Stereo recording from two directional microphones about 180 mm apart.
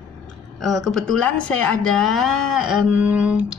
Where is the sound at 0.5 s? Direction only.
Centre (ahead or behind).